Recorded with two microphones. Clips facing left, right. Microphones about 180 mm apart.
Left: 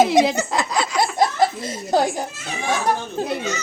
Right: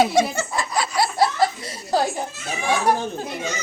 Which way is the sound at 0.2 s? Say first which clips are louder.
Left 3 dB; 20° left (ahead or behind).